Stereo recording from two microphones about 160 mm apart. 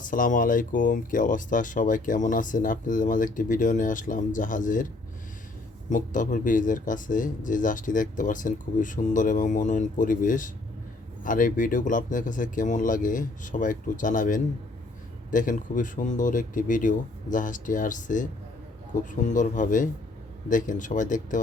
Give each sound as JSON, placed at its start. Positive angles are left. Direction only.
{"t": 0.1, "sound": "speech", "side_deg": 55}
{"t": 5.9, "sound": "speech", "side_deg": 55}